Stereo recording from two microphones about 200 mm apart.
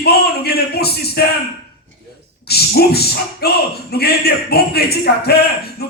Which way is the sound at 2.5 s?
55° left (ahead or behind).